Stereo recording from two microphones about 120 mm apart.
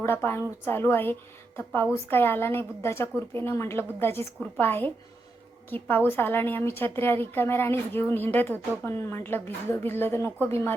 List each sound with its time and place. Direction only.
0.0 s a woman's voice: 20° left (ahead or behind)
6.1 s a woman's voice: 15° left (ahead or behind)